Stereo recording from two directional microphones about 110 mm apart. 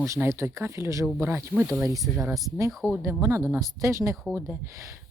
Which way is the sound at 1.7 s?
Centre (ahead or behind).